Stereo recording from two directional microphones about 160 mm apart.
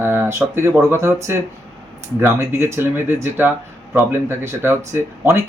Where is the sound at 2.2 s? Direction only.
15° right (ahead or behind).